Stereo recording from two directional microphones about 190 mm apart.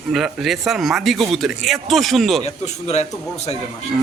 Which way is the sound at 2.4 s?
35° left (ahead or behind).